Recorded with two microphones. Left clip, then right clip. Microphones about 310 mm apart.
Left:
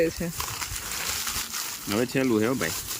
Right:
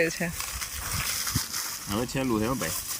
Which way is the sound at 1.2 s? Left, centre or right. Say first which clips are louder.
Even; centre.